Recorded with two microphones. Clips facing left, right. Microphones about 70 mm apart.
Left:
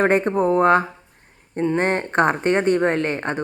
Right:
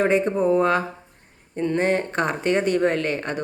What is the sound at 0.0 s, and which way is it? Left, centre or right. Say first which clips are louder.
Speech: left 2 dB; left.